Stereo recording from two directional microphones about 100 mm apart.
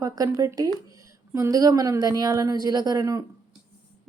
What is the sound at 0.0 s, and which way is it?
A woman's voice, 35° right (ahead or behind).